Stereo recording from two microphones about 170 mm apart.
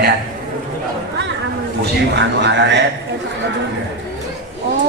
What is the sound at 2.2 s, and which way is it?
Speech, 90° right.